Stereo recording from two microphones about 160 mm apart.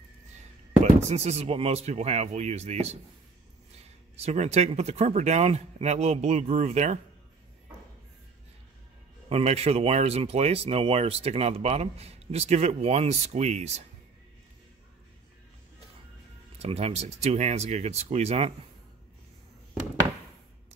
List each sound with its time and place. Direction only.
1.0 s speech: 40° right (ahead or behind)
4.2 s speech: 45° right (ahead or behind)
9.3 s speech: 40° right (ahead or behind)
16.5 s speech: 40° right (ahead or behind)